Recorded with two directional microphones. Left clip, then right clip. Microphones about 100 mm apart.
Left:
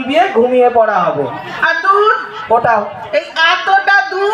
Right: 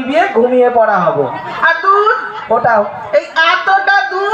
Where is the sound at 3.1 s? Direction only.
75° right (ahead or behind).